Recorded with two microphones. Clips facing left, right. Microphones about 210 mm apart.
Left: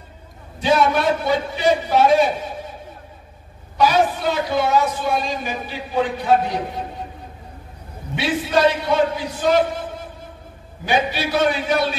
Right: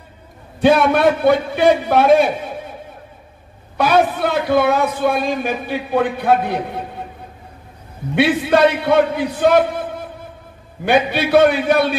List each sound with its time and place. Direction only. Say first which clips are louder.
0.6 s a man's voice: right 5 dB; 55° right (ahead or behind)
3.7 s a man's voice: right 2 dB; 55° right (ahead or behind)
8.2 s a man's voice: right 5 dB; 60° right (ahead or behind)